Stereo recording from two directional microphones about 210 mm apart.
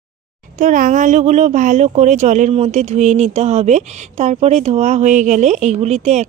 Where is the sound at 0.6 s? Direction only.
40° right (ahead or behind).